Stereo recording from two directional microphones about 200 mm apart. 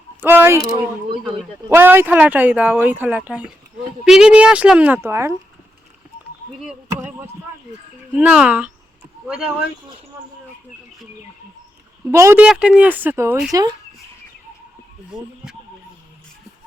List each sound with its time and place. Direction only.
0.2 s speech: 10° right (ahead or behind)
1.7 s speech: 10° right (ahead or behind)
6.6 s speech: 5° right (ahead or behind)
8.1 s speech: 5° right (ahead or behind)
12.1 s speech: 15° right (ahead or behind)